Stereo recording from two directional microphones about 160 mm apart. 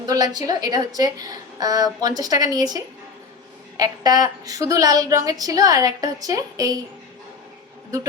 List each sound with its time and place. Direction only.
0.0 s a woman's voice: 25° right (ahead or behind)